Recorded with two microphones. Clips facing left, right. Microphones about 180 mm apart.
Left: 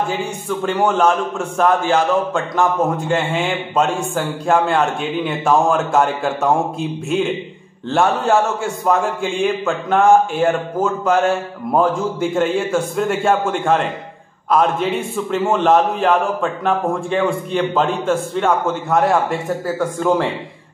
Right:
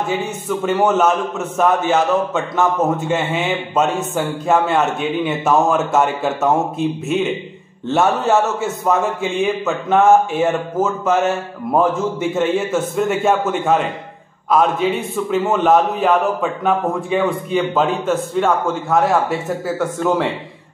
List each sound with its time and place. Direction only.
0.5 s a man's voice: 5° right (ahead or behind)